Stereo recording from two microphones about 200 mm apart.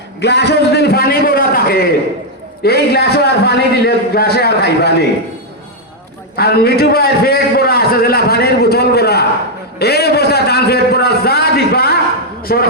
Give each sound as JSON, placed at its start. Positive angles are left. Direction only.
{"t": 0.2, "sound": "a man's voice", "side_deg": 55}
{"t": 6.3, "sound": "a man's voice", "side_deg": 50}